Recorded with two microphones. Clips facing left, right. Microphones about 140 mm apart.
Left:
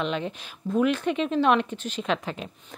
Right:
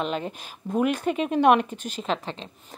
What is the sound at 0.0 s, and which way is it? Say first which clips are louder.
A woman's voice: even; 45° right (ahead or behind).